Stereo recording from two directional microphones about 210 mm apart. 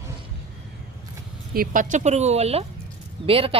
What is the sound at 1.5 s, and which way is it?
Speech, 40° right (ahead or behind).